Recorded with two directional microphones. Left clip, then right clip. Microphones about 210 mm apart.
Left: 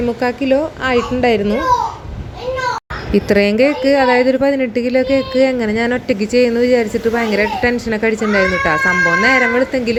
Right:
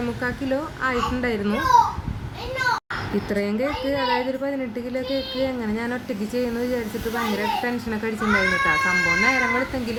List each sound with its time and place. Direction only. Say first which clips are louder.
0.2 s speech: left 11 dB; 20° left (ahead or behind)
3.2 s speech: left 14 dB; 30° left (ahead or behind)